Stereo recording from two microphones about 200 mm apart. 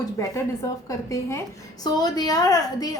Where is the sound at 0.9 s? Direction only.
15° left (ahead or behind).